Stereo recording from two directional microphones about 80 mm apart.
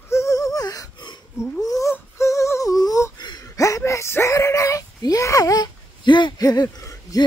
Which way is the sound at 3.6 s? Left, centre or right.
Left.